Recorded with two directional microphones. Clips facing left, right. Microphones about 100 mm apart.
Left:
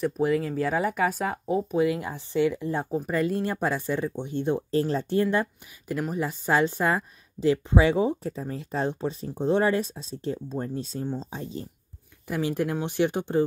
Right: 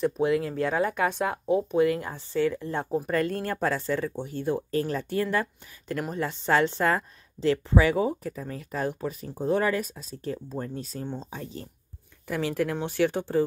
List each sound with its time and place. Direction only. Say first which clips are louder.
0.0 s speech: even; centre (ahead or behind); by 5.5 s 20° left (ahead or behind)
5.9 s speech: left 1 dB; 5° left (ahead or behind)